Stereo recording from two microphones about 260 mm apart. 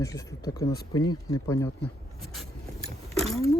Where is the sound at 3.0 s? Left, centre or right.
Right.